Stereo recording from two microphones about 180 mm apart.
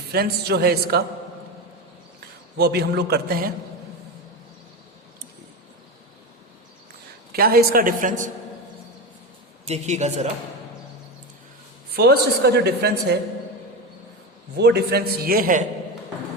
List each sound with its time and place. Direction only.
0.1 s a woman's voice: 60° right (ahead or behind)
2.6 s a woman's voice: 65° right (ahead or behind)
7.3 s a woman's voice: 55° right (ahead or behind)
9.6 s a woman's voice: 35° right (ahead or behind)
11.9 s a woman's voice: 65° right (ahead or behind)
14.5 s a woman's voice: 65° right (ahead or behind)